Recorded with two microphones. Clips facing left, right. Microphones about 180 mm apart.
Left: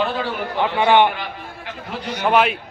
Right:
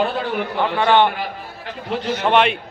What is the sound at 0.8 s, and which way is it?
Speech, 15° left (ahead or behind).